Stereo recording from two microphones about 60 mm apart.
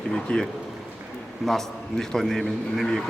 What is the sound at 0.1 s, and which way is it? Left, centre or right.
Speech, centre.